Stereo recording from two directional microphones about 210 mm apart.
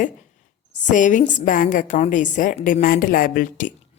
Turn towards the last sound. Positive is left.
turn(degrees=40)  # may be behind; listen again after turning